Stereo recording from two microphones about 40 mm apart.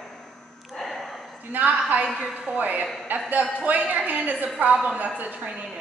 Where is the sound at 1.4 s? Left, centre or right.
Right.